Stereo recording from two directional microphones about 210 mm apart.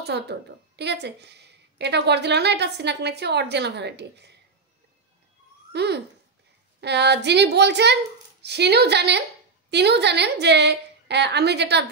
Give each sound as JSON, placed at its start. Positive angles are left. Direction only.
{"t": 0.0, "sound": "a woman's voice", "side_deg": -50}
{"t": 5.7, "sound": "a woman's voice", "side_deg": -50}